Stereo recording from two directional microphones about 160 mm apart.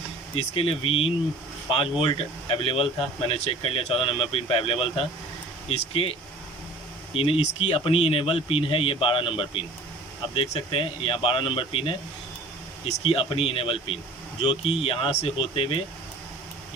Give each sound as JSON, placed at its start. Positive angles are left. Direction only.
{"t": 0.3, "sound": "speech", "side_deg": 35}
{"t": 13.0, "sound": "speech", "side_deg": 35}